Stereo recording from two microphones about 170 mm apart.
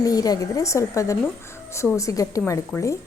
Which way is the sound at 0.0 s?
20° left (ahead or behind).